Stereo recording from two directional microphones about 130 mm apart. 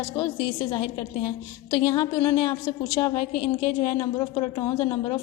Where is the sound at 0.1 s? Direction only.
25° left (ahead or behind).